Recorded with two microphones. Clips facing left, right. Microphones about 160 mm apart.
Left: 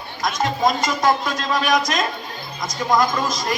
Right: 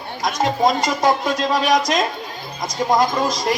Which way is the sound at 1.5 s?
35° right (ahead or behind).